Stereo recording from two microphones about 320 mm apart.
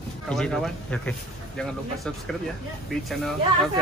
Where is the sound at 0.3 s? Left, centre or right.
Centre.